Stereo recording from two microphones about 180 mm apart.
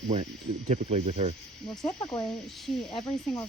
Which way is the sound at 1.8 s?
20° left (ahead or behind).